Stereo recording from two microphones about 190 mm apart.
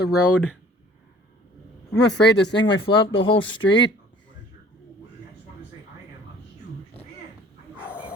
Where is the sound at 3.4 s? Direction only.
80° left.